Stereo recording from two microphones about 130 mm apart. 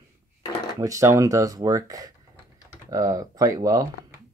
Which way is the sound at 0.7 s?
25° right (ahead or behind).